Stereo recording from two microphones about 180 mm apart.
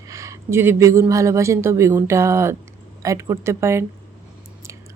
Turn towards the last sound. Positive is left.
turn(degrees=-15)  # may be behind; listen again after turning